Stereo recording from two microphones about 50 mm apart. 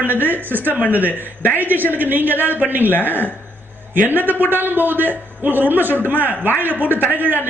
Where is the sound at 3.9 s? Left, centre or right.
Right.